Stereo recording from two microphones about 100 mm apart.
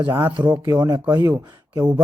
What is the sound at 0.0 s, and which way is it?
Speech, 25° right (ahead or behind).